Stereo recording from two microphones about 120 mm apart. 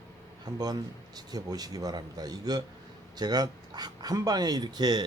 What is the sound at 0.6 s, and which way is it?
Speech, 35° right (ahead or behind).